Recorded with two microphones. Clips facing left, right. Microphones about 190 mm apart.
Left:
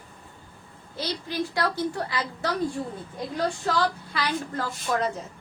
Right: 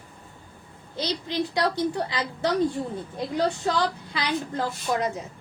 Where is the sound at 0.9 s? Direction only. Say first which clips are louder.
Right 2 dB; 20° right (ahead or behind).